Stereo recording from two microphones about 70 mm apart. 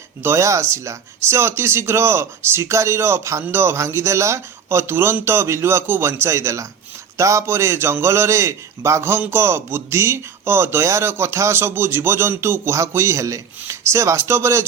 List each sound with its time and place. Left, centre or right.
0.2 s a man's voice: right